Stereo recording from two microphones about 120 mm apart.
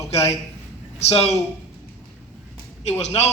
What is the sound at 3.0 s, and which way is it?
Speech, 65° left (ahead or behind).